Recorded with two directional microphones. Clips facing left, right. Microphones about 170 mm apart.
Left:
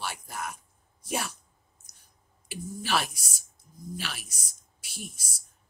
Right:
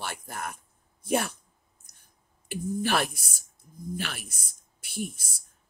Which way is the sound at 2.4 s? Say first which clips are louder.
Right 5 dB; 50° right (ahead or behind).